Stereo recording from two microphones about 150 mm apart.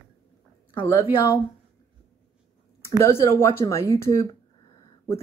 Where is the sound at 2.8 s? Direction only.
15° left (ahead or behind).